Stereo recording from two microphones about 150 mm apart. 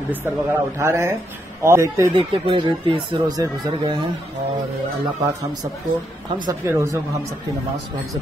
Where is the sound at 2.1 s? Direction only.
35° right (ahead or behind).